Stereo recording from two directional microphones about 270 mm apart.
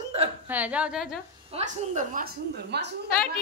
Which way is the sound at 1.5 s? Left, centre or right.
Right.